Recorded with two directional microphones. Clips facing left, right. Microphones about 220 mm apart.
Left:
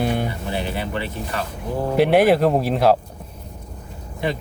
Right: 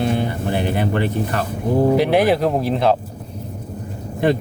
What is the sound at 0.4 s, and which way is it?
Speech, 55° right (ahead or behind).